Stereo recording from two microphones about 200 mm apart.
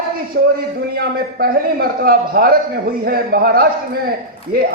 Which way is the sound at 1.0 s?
50° right (ahead or behind).